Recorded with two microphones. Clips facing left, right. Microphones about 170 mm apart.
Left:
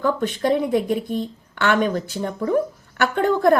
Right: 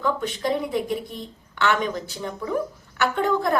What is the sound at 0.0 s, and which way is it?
A woman's voice, 45° left (ahead or behind).